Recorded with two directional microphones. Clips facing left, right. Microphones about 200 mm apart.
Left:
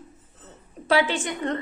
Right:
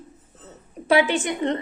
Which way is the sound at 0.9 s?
15° right (ahead or behind).